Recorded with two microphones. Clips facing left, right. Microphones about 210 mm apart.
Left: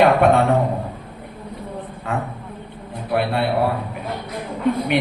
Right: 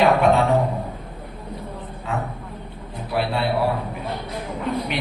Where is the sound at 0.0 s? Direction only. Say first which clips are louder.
Left 2 dB; 55° left (ahead or behind).